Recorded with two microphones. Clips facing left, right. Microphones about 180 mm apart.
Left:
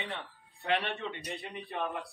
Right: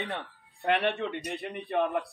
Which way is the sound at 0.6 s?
60° right (ahead or behind).